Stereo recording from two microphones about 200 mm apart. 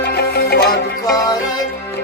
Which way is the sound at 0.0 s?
55° left (ahead or behind).